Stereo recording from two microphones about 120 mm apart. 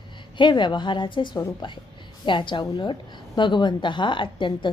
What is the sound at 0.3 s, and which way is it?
A woman's voice, 40° left (ahead or behind).